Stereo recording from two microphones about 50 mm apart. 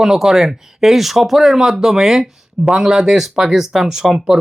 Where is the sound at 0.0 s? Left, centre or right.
Centre.